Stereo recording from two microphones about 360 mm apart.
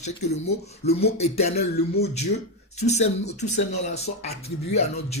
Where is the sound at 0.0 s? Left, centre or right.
Centre.